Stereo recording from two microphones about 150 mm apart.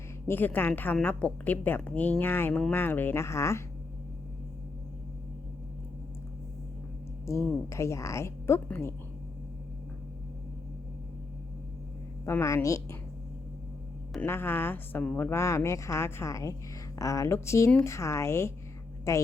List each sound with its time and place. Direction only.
0.3 s a woman's voice: 15° left (ahead or behind)
7.3 s speech: 20° left (ahead or behind)
12.2 s speech: 20° left (ahead or behind)
14.3 s speech: 15° left (ahead or behind)